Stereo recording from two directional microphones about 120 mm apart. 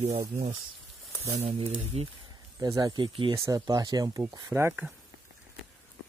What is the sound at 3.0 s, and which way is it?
Speech, 45° right (ahead or behind).